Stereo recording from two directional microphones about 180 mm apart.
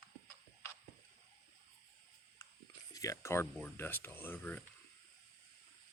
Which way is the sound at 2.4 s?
20° left (ahead or behind).